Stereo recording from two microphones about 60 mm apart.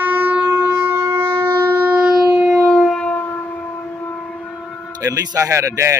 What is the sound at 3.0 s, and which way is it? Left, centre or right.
Civil defense siren, left.